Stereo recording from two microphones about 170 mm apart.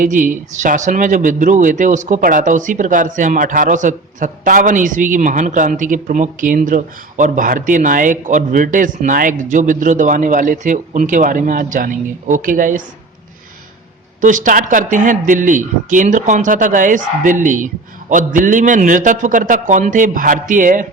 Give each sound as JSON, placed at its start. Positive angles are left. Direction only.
{"t": 0.0, "sound": "speech", "side_deg": -50}
{"t": 14.2, "sound": "speech", "side_deg": -50}